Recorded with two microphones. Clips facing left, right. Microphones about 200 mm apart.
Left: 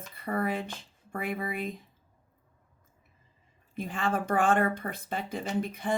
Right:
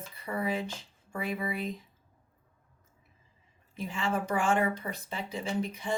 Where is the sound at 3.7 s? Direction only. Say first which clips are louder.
Left 1 dB; 55° left (ahead or behind).